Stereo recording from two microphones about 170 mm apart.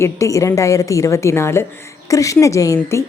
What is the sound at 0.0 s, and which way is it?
A woman's voice, 20° left (ahead or behind).